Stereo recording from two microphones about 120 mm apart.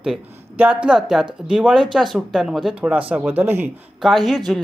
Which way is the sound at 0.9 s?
5° right (ahead or behind).